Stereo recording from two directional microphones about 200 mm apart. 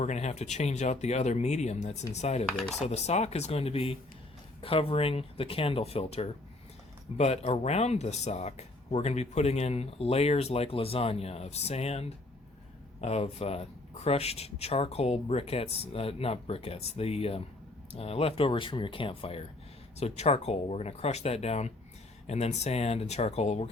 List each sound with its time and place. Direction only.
0.0 s speech: 35° left (ahead or behind)
2.5 s speech: centre (ahead or behind)
2.8 s speech: 35° left (ahead or behind)